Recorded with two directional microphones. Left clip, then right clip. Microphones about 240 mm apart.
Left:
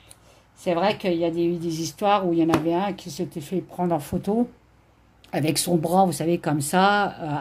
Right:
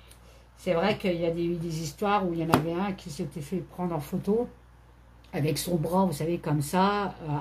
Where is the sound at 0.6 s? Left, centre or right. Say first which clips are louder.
Left 4 dB; left.